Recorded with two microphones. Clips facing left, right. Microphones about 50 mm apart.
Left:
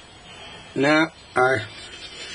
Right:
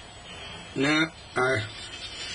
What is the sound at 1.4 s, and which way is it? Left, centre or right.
Speech, centre.